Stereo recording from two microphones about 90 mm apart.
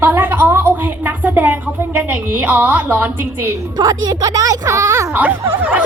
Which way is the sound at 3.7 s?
45° right (ahead or behind).